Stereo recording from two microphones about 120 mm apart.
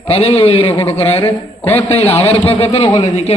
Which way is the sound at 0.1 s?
55° left (ahead or behind).